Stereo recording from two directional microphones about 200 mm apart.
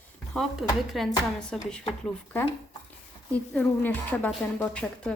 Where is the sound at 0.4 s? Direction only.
Centre (ahead or behind).